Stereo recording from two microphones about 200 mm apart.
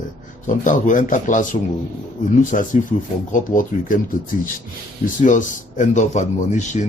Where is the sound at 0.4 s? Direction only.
40° left (ahead or behind).